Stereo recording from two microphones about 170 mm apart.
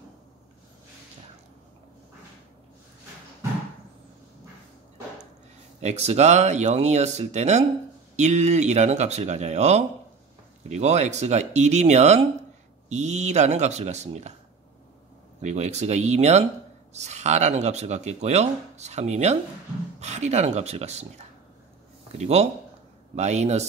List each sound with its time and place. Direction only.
5.8 s speech: 40° right (ahead or behind)
15.4 s speech: 40° right (ahead or behind)